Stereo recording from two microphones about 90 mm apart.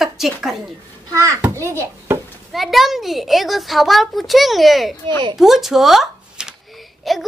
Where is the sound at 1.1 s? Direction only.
35° right (ahead or behind).